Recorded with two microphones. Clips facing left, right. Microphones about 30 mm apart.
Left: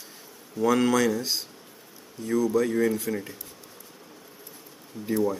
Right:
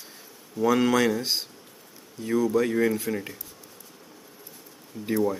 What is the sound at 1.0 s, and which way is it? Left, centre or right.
Speech, right.